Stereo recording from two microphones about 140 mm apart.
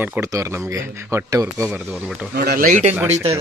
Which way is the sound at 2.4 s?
90° right.